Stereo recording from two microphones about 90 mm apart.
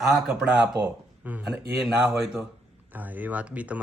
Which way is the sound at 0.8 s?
15° right (ahead or behind).